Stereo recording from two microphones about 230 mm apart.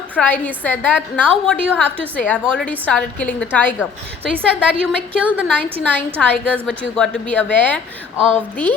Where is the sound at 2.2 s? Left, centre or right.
Centre.